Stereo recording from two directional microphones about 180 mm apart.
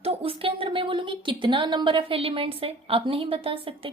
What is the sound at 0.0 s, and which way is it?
A woman's voice, 30° right (ahead or behind).